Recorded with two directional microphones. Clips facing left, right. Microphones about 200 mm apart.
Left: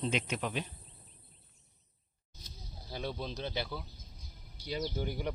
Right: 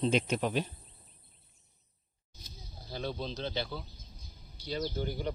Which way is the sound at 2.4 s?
10° left (ahead or behind).